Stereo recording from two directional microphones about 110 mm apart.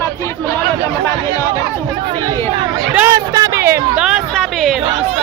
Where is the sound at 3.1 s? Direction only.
35° right (ahead or behind).